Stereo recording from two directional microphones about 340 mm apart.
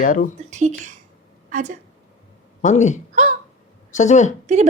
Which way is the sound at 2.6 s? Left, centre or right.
Left.